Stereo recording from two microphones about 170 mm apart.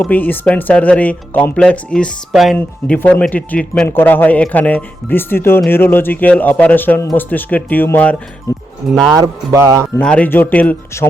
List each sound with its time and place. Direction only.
0.0 s speech: 10° left (ahead or behind)
8.9 s speech: centre (ahead or behind)
9.1 s music: 20° right (ahead or behind)
10.0 s speech: 5° left (ahead or behind)